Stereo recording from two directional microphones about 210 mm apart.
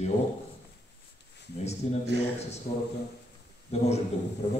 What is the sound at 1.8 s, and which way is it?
Speech, 30° left (ahead or behind).